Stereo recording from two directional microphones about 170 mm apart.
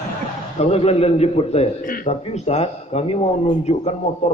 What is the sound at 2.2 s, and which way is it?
A man's voice, 40° left (ahead or behind).